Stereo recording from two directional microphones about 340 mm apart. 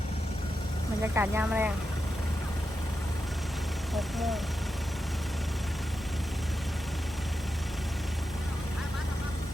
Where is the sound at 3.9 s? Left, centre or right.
Centre.